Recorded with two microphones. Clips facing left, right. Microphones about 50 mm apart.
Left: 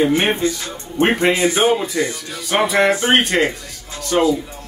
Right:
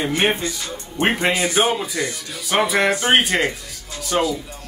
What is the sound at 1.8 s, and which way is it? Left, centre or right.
Speech, centre.